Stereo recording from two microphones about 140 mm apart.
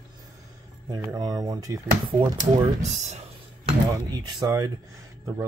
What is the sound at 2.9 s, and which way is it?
Speech, 55° right (ahead or behind).